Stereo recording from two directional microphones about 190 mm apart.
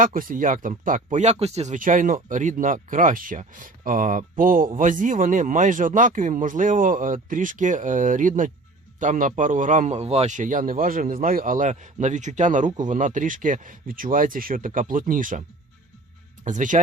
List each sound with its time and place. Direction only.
0.0 s a man's voice: 45° right (ahead or behind)